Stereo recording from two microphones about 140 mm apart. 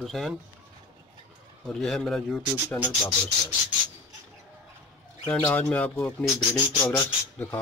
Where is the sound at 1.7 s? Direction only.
Centre (ahead or behind).